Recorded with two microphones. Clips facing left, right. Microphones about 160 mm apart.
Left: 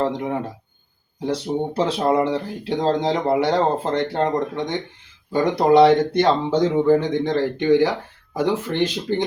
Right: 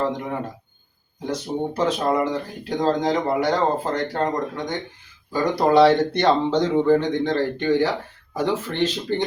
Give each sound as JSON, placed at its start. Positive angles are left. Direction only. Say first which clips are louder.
{"t": 0.0, "sound": "speech", "louder": "left 2 dB", "side_deg": 25}